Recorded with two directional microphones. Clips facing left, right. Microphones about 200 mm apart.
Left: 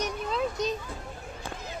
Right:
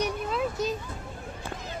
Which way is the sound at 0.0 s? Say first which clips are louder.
Right 1 dB; 5° right (ahead or behind).